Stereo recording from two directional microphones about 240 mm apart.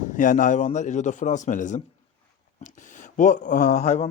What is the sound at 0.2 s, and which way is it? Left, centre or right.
A man's voice, left.